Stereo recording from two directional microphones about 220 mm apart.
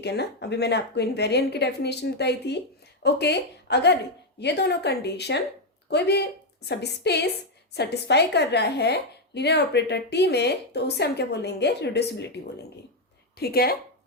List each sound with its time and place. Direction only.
0.0 s a woman's voice: 50° left (ahead or behind)
13.3 s a woman's voice: 45° left (ahead or behind)